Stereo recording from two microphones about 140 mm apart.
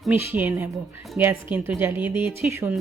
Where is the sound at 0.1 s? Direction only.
15° right (ahead or behind).